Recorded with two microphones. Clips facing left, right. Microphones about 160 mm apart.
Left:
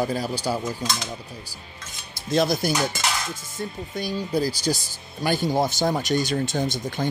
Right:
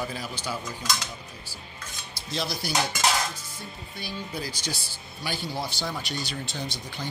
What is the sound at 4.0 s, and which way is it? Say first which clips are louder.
Speech: left 10 dB; 40° left (ahead or behind).